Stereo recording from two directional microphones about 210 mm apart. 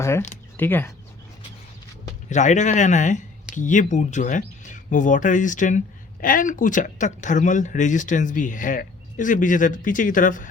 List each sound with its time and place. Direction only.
0.0 s speech: 15° left (ahead or behind)
2.3 s speech: 35° left (ahead or behind)